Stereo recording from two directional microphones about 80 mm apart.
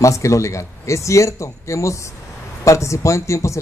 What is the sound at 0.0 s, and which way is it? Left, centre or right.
Speech, left.